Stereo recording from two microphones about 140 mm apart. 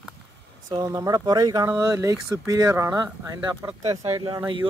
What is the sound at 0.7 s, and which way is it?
Speech, 30° right (ahead or behind).